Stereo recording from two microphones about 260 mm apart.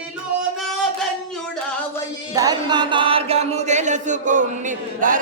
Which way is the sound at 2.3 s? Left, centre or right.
Centre.